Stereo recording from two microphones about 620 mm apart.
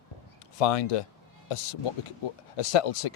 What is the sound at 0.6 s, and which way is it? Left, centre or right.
Speech, left.